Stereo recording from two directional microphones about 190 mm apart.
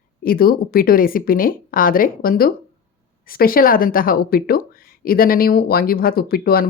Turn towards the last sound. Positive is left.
turn(degrees=50)  # may be behind; listen again after turning